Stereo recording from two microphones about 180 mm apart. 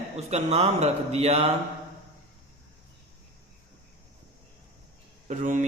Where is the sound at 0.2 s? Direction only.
35° right (ahead or behind).